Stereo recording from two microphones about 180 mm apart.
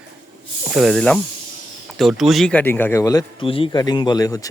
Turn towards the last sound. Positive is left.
turn(degrees=20)  # may be behind; listen again after turning